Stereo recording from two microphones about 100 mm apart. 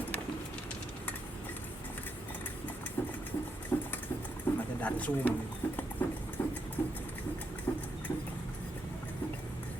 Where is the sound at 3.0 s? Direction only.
20° left (ahead or behind).